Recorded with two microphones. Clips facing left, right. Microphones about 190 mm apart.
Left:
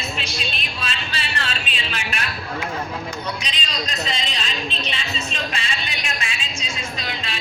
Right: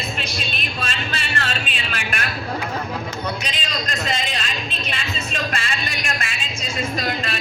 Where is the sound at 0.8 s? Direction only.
45° right (ahead or behind).